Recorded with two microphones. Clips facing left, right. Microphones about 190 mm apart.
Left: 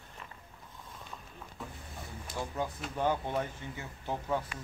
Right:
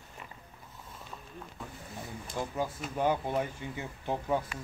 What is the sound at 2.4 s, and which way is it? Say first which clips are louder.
A man's voice: right 2 dB; 5° right (ahead or behind).